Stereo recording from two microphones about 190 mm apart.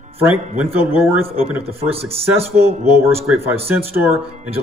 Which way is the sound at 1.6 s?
30° right (ahead or behind).